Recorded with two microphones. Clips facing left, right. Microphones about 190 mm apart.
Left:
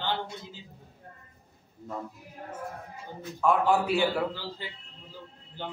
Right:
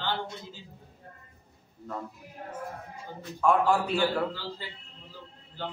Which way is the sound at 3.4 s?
5° left (ahead or behind).